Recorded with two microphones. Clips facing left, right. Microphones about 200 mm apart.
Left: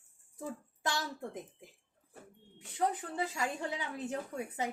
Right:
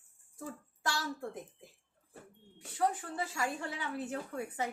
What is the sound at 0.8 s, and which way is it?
Speech, 20° left (ahead or behind).